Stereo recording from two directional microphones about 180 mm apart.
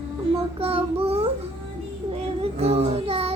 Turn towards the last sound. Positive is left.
turn(degrees=-35)  # may be behind; listen again after turning